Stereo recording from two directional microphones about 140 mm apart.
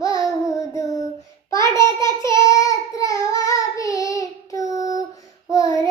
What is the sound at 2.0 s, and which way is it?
Child singing, 20° left (ahead or behind).